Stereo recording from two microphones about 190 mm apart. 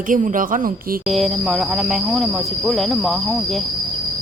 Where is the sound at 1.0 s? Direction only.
Centre (ahead or behind).